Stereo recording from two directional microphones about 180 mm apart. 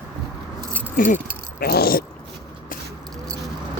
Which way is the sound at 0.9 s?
50° left (ahead or behind).